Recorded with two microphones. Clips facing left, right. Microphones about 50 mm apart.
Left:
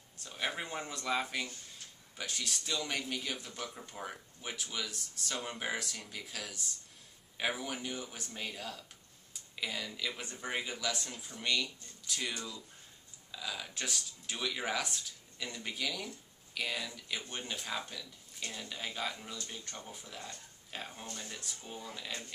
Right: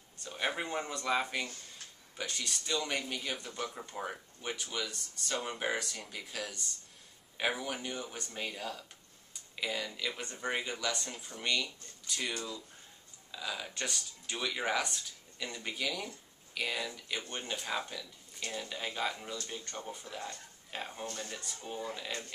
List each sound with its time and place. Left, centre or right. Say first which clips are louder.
0.2 s speech: right 3 dB; centre
4.4 s speech: right 2 dB; centre
20.1 s speech: right 4 dB; right
20.7 s speech: right 3 dB; centre
21.3 s speech: right 2 dB; centre
21.8 s speech: right 2 dB; centre